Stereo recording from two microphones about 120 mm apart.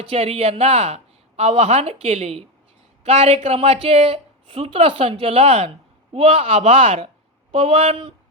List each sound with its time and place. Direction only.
0.0 s speech: 55° right (ahead or behind)